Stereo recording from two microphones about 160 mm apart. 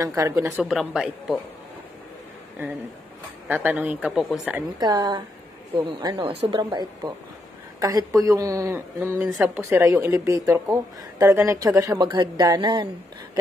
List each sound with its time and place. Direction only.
0.0 s speech: 20° right (ahead or behind)
0.7 s speech: centre (ahead or behind)
3.4 s speech: 10° right (ahead or behind)
4.6 s speech: 25° right (ahead or behind)